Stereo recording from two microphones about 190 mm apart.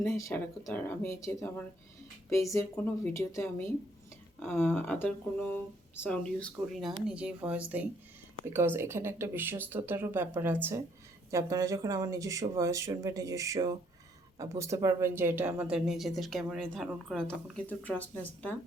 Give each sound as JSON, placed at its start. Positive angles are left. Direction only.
{"t": 0.0, "sound": "speech", "side_deg": 15}